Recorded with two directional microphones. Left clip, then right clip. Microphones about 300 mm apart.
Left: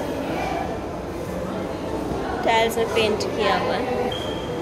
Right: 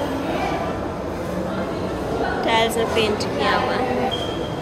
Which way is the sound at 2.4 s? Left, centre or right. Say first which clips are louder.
Left 1 dB; centre.